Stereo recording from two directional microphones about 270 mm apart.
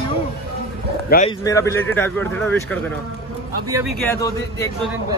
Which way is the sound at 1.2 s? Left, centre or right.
Centre.